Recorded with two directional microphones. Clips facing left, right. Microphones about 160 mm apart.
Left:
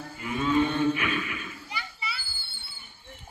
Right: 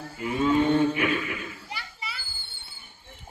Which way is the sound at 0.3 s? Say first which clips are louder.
Right 3 dB; 25° right (ahead or behind).